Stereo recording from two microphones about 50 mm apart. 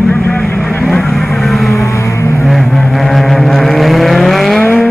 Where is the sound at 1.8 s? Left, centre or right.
Left.